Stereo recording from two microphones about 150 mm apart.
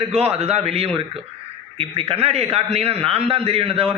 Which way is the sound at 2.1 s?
40° right (ahead or behind).